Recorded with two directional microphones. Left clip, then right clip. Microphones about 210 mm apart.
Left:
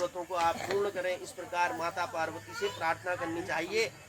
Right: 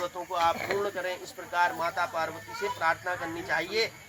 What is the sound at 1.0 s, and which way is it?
Speech, 10° left (ahead or behind).